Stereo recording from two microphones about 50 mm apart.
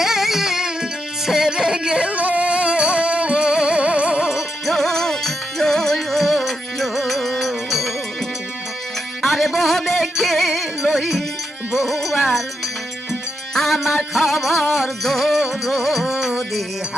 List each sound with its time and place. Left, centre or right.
0.0 s music: centre
2.0 s music: right
4.6 s music: centre
9.2 s music: centre
13.5 s music: centre